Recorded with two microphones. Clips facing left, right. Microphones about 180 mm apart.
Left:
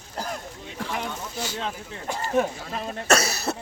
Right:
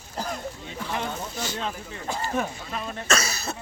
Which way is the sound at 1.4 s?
15° left (ahead or behind).